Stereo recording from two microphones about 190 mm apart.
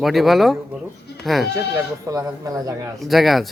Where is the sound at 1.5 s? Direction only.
15° right (ahead or behind).